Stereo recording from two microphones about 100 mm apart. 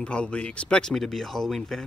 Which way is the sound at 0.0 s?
10° left (ahead or behind).